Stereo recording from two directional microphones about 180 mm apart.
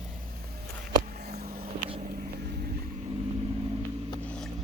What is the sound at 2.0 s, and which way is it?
Vehicle, 55° right (ahead or behind).